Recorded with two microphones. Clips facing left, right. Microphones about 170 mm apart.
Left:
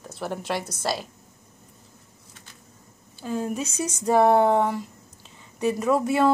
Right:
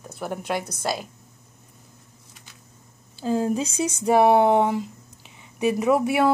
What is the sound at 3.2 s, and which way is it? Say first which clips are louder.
Speech: right 5 dB; 30° right (ahead or behind).